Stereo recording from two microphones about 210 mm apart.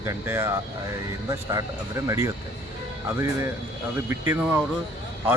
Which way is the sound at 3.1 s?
10° right (ahead or behind).